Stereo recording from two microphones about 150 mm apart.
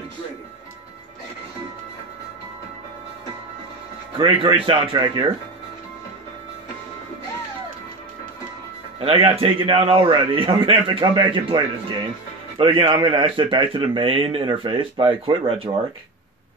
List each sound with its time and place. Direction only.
4.2 s a man's voice: 35° right (ahead or behind)
9.0 s a man's voice: 40° right (ahead or behind)